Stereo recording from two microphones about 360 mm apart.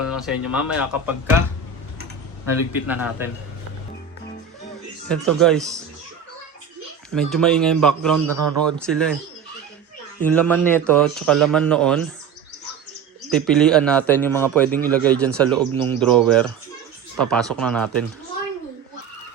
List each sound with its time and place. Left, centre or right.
0.0 s speech: centre
2.8 s a man's voice: centre
5.0 s a man's voice: centre
7.1 s a man's voice: centre
8.3 s speech: right
8.6 s a man's voice: centre
10.2 s a man's voice: centre
13.3 s a man's voice: centre